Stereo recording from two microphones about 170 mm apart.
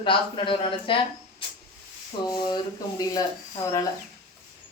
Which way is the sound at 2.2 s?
25° left (ahead or behind).